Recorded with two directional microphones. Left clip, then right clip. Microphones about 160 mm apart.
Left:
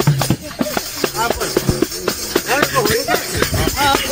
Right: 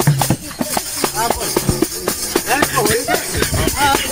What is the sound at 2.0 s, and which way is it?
Music, 30° right (ahead or behind).